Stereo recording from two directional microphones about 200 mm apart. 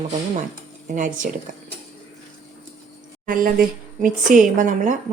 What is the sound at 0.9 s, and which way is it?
Speech, 40° right (ahead or behind).